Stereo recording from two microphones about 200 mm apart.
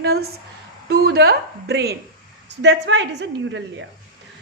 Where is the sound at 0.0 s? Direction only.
50° right (ahead or behind).